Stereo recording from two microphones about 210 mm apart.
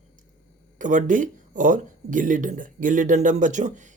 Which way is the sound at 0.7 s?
35° right (ahead or behind).